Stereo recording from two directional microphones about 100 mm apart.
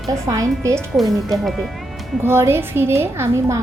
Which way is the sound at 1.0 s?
Centre (ahead or behind).